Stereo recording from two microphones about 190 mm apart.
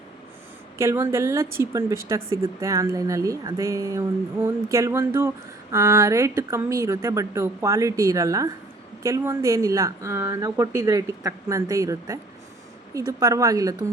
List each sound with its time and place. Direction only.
0.8 s a woman's voice: 15° right (ahead or behind)